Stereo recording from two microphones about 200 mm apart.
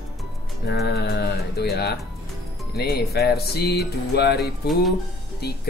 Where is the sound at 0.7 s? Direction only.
55° left (ahead or behind).